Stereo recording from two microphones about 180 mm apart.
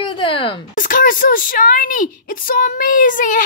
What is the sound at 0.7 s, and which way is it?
Speech, 50° left (ahead or behind).